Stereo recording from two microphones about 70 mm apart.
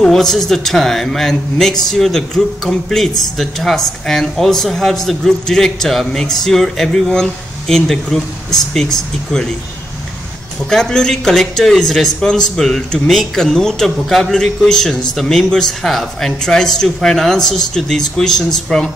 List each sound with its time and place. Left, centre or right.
0.0 s speech: centre
10.7 s speech: centre